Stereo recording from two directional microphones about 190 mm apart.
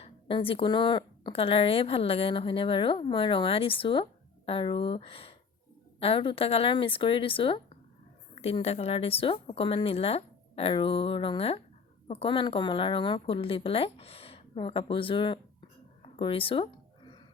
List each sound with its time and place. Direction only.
0.0 s speech: 30° left (ahead or behind)